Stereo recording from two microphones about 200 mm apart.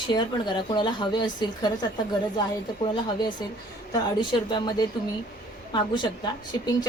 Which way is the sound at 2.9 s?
20° left (ahead or behind).